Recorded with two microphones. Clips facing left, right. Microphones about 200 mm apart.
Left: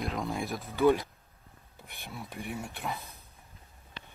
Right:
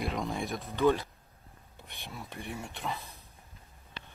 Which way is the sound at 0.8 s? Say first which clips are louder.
Left 2 dB; 15° left (ahead or behind).